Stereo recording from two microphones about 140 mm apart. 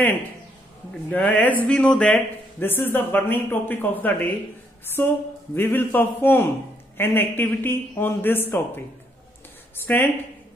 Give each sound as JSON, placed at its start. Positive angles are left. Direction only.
{"t": 1.1, "sound": "a man's voice", "side_deg": 10}
{"t": 9.8, "sound": "a man's voice", "side_deg": 15}